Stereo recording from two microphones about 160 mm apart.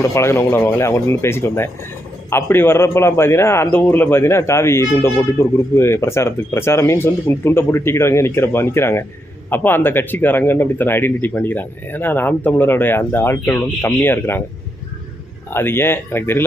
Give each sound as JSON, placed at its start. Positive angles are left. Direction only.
{"t": 0.1, "sound": "a man's voice", "side_deg": 15}
{"t": 15.5, "sound": "a man's voice", "side_deg": 15}